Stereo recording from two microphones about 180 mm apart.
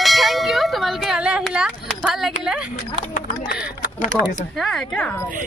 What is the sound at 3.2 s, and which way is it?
Speech, 50° left (ahead or behind).